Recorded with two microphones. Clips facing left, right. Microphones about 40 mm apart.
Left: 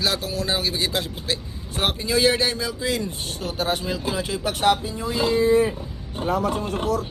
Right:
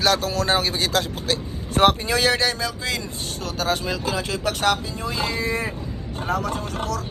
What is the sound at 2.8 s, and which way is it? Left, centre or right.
Speech, right.